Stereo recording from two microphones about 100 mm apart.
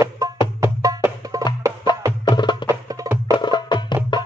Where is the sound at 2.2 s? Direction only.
50° left (ahead or behind).